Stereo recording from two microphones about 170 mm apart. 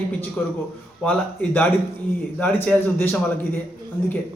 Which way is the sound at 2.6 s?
10° left (ahead or behind).